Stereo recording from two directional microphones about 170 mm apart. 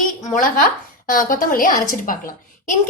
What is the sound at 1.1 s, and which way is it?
A woman's voice, 55° left (ahead or behind).